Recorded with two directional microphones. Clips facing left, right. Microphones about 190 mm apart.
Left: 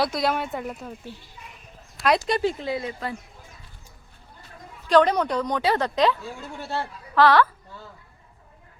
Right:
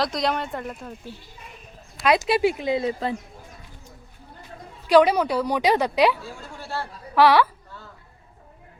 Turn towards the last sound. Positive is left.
turn(degrees=-10)  # may be behind; listen again after turning